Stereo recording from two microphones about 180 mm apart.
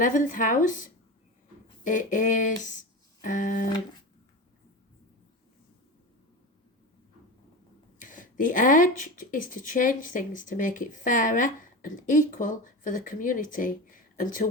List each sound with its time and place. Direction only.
0.0 s speech: 45° left (ahead or behind)
7.9 s speech: 50° left (ahead or behind)